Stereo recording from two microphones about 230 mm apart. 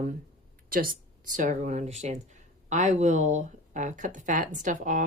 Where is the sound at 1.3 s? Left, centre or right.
Right.